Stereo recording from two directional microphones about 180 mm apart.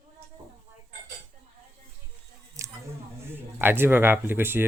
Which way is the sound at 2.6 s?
15° right (ahead or behind).